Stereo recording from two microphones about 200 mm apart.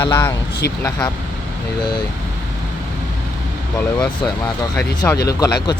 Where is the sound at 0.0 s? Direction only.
15° left (ahead or behind).